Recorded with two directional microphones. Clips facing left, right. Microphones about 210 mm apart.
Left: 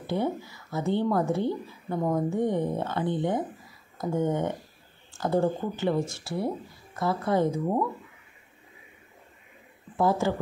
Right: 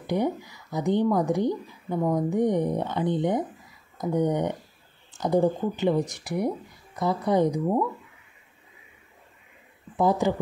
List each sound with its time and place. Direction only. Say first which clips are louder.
0.0 s speech: right 2 dB; 15° right (ahead or behind)
9.9 s speech: right 2 dB; 20° right (ahead or behind)